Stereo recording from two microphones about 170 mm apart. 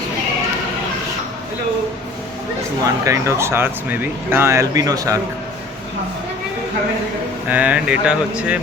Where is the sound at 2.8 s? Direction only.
20° right (ahead or behind).